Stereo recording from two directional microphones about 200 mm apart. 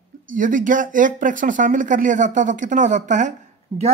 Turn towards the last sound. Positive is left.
turn(degrees=-25)  # may be behind; listen again after turning